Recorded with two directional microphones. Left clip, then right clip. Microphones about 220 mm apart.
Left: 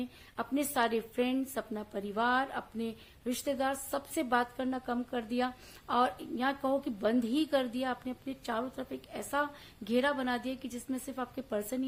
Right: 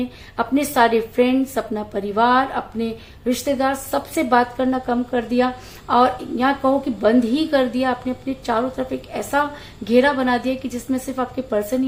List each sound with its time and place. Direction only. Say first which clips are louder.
0.0 s a woman's voice: right 15 dB; 30° left (ahead or behind)